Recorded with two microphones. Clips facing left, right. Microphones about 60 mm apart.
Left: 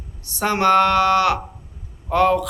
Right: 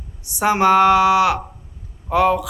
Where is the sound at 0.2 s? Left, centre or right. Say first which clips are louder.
Right 3 dB; centre.